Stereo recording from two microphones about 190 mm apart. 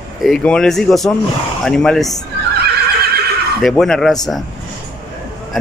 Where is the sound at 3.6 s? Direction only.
Centre (ahead or behind).